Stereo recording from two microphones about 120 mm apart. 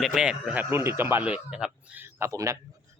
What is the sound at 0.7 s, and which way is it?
Speech, 20° right (ahead or behind).